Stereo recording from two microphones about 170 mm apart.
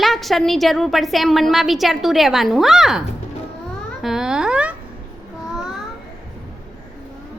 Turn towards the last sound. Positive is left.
turn(degrees=-5)  # may be behind; listen again after turning